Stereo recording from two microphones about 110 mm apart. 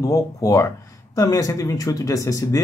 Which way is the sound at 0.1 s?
30° left (ahead or behind).